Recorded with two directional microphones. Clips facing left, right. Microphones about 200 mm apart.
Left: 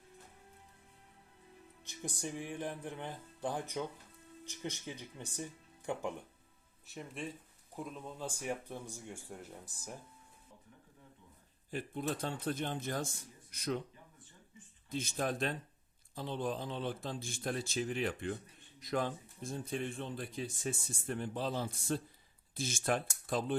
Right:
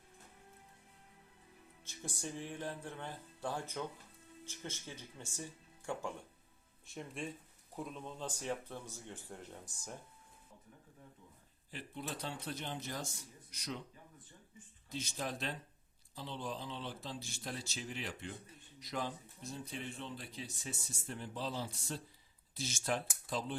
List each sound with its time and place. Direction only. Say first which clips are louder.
1.8 s speech: left 3 dB; 15° left (ahead or behind)
6.8 s speech: even; centre (ahead or behind)
11.7 s speech: left 7 dB; 50° left (ahead or behind)
14.8 s speech: left 5 dB; 50° left (ahead or behind)